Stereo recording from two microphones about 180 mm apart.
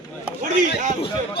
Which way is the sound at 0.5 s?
45° right (ahead or behind).